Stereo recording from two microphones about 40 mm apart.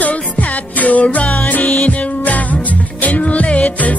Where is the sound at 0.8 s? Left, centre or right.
Left.